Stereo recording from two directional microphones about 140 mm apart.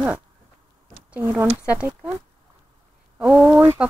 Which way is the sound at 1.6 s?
10° right (ahead or behind).